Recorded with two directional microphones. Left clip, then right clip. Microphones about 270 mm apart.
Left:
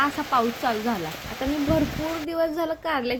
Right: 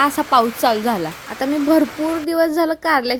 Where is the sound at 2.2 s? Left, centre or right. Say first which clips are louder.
Right 8 dB; right.